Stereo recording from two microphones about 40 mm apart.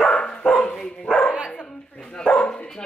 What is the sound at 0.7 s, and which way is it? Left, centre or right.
Dog, centre.